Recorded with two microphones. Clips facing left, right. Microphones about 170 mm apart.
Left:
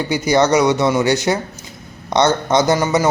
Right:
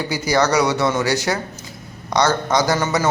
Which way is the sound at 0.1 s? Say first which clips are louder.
Left 4 dB; 20° left (ahead or behind).